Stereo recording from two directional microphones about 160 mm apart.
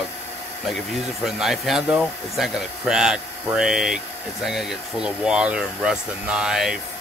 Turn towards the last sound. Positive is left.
turn(degrees=-5)  # may be behind; listen again after turning